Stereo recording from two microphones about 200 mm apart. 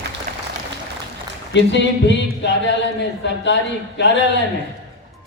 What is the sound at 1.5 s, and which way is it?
A man's voice, 65° left (ahead or behind).